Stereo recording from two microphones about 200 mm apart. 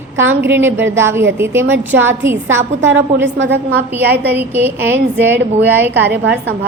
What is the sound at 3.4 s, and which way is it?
Speech, 60° right (ahead or behind).